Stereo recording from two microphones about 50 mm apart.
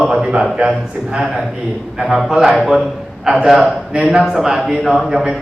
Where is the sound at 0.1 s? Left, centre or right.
Centre.